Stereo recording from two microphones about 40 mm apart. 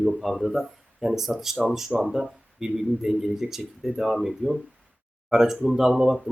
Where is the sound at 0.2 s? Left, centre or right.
Centre.